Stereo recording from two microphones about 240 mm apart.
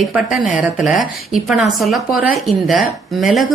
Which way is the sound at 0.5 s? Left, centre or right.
Centre.